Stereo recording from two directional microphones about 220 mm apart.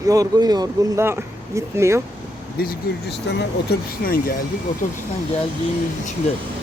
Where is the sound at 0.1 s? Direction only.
15° right (ahead or behind).